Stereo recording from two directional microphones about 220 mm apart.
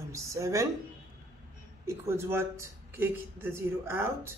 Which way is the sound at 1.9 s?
10° right (ahead or behind).